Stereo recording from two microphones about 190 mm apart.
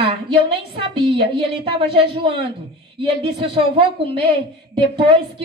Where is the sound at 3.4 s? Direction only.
30° right (ahead or behind).